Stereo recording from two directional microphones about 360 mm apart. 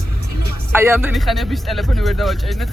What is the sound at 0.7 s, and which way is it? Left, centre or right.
A man's voice, centre.